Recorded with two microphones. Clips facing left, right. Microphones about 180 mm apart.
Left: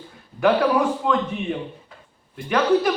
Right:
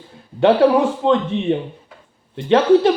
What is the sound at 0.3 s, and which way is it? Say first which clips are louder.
Speech: right 5 dB; 30° right (ahead or behind).